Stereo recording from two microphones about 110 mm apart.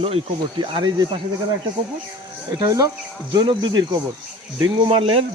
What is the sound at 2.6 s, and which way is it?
Speech, 30° right (ahead or behind).